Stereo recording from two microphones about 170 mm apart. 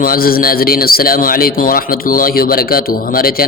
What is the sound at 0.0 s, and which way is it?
A man's voice, 60° left (ahead or behind).